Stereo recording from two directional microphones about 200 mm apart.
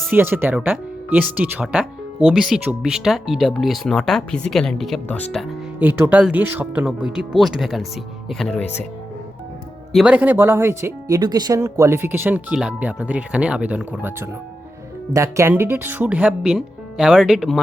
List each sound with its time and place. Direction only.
0.1 s speech: 10° right (ahead or behind)
5.8 s speech: 10° right (ahead or behind); by 8.9 s 5° left (ahead or behind)
9.9 s speech: 5° right (ahead or behind)